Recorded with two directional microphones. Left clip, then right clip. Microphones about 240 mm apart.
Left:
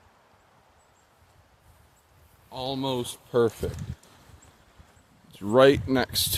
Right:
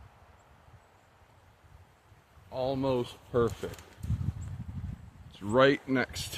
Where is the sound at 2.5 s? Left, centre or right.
Left.